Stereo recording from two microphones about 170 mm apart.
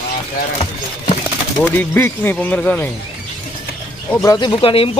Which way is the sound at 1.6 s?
10° left (ahead or behind).